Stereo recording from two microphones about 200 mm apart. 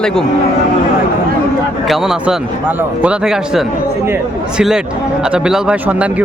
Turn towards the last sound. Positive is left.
turn(degrees=-5)  # may be behind; listen again after turning